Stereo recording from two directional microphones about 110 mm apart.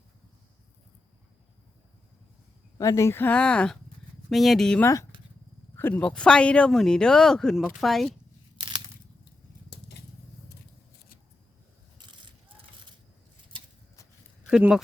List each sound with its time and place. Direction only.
2.7 s speech: 30° left (ahead or behind); by 4.8 s 5° left (ahead or behind)
4.8 s speech: 30° left (ahead or behind)
5.7 s speech: 15° left (ahead or behind)
11.9 s vehicle: 45° right (ahead or behind)